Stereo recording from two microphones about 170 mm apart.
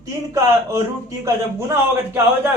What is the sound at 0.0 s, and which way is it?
A man's voice, 20° right (ahead or behind).